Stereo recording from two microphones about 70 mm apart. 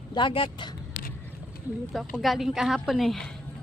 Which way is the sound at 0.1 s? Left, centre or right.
Left.